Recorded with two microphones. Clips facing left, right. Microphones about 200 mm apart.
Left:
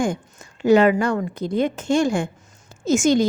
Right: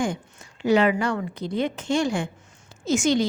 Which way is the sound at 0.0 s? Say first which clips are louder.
Left 3 dB; 45° left (ahead or behind).